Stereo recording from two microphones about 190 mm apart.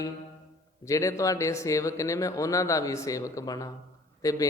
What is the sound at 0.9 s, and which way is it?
Speech, 15° left (ahead or behind).